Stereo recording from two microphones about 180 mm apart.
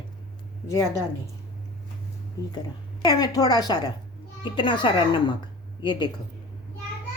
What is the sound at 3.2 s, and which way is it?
A woman's voice, 20° left (ahead or behind).